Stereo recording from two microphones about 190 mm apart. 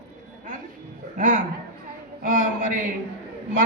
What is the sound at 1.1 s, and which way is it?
A woman's voice, 45° right (ahead or behind).